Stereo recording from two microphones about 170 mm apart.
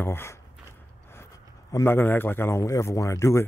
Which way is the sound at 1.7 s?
15° left (ahead or behind).